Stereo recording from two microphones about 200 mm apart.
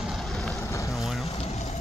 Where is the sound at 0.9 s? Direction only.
Centre (ahead or behind).